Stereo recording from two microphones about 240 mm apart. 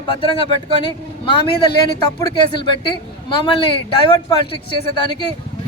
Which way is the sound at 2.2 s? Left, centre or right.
Centre.